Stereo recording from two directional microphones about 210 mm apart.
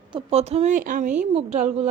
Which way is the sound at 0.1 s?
30° right (ahead or behind).